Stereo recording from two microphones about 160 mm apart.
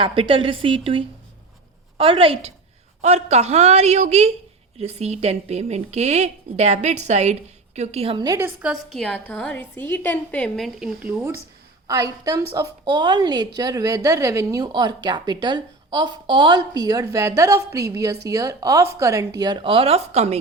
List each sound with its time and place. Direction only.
0.0 s a woman's voice: 35° right (ahead or behind)
8.2 s a woman's voice: 25° right (ahead or behind)
8.4 s a woman's voice: 10° right (ahead or behind); by 10.7 s 5° left (ahead or behind)
10.8 s speech: 5° right (ahead or behind)
11.9 s a woman's voice: 20° right (ahead or behind); by 20.4 s 40° right (ahead or behind)